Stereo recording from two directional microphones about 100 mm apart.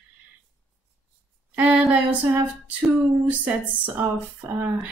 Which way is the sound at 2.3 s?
15° right (ahead or behind).